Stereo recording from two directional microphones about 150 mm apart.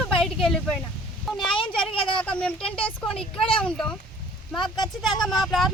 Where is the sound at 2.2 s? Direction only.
10° left (ahead or behind).